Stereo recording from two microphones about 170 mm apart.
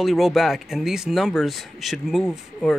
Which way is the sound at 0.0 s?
Centre (ahead or behind).